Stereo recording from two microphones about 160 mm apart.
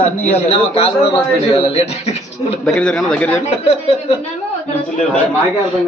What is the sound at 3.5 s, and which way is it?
Speech, 40° left (ahead or behind).